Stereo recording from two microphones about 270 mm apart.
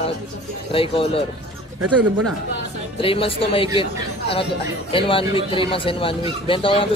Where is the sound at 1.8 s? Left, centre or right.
Right.